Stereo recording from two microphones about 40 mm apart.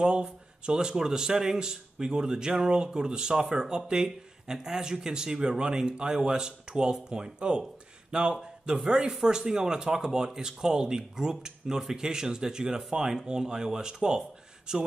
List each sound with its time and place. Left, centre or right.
0.0 s speech: right